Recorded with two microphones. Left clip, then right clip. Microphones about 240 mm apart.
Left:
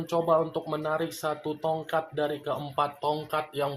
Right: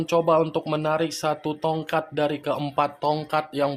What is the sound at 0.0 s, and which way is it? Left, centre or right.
Speech, right.